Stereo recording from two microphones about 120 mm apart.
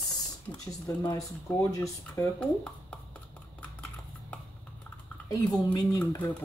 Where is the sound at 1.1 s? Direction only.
25° left (ahead or behind).